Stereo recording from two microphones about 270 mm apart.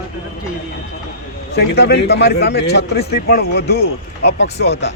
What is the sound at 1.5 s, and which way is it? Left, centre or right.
A man's voice, left.